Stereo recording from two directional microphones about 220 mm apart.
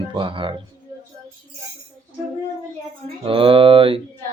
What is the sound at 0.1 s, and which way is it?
Speech, 20° right (ahead or behind).